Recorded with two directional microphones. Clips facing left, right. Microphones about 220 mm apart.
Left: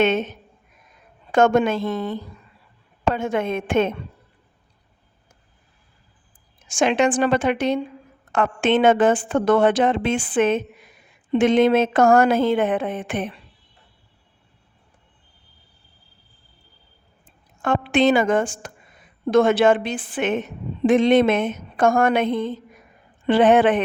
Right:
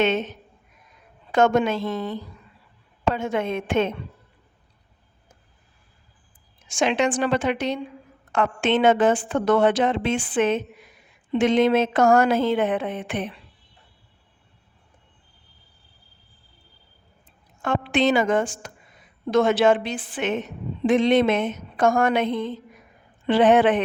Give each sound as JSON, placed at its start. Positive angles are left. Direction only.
{"t": 0.0, "sound": "a woman's voice", "side_deg": 50}
{"t": 1.3, "sound": "a woman's voice", "side_deg": 50}
{"t": 6.7, "sound": "a woman's voice", "side_deg": 50}
{"t": 17.6, "sound": "a woman's voice", "side_deg": 50}